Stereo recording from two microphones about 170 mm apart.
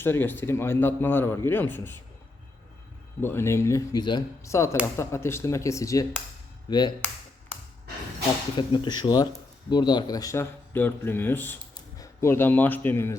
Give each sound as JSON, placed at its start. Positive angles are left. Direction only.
{"t": 0.0, "sound": "a man's voice", "side_deg": 10}
{"t": 3.2, "sound": "a man's voice", "side_deg": 15}
{"t": 8.5, "sound": "speech", "side_deg": 30}